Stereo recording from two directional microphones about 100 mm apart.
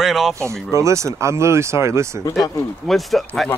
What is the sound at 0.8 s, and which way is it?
Speech, 30° right (ahead or behind).